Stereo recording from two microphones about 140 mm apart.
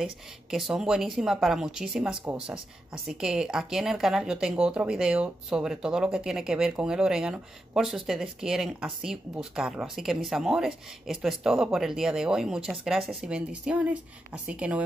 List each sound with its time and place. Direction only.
0.0 s speech: 5° right (ahead or behind)